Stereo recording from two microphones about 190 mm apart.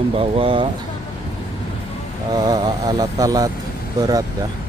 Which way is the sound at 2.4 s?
20° right (ahead or behind).